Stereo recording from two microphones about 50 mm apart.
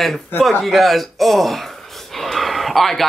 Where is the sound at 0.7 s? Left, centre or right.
Centre.